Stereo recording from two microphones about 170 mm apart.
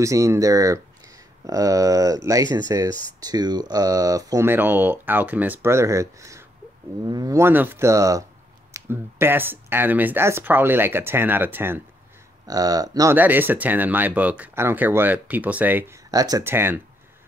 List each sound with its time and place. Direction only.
0.0 s speech: 20° right (ahead or behind)
13.1 s speech: 10° right (ahead or behind)